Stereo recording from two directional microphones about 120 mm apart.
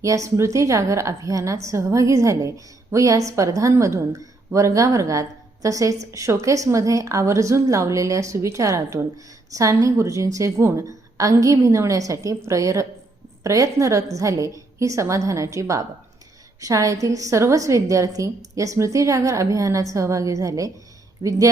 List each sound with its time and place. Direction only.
0.0 s a woman's voice: 25° right (ahead or behind)